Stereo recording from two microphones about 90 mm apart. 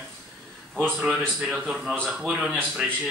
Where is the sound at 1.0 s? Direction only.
5° right (ahead or behind).